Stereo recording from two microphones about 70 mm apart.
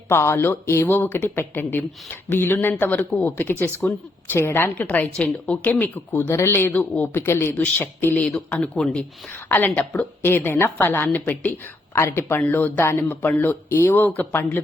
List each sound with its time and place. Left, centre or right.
0.1 s a woman's voice: left
8.4 s a woman's voice: centre
9.3 s a woman's voice: left
11.9 s a woman's voice: left